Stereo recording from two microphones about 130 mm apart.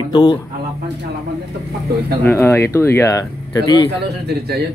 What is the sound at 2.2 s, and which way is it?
Speech, 20° left (ahead or behind).